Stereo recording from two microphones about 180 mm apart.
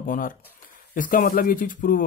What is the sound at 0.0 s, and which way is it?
Speech, 50° left (ahead or behind).